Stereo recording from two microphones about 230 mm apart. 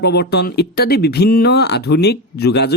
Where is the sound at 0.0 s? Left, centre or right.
Left.